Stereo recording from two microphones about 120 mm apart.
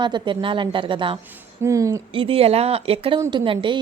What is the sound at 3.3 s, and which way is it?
Speech, 40° right (ahead or behind).